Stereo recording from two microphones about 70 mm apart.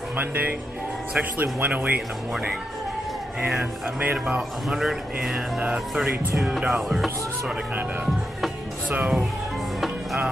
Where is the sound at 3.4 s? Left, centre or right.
Centre.